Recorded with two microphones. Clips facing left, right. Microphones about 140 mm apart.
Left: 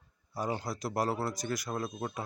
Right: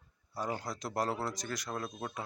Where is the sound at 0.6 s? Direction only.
10° left (ahead or behind).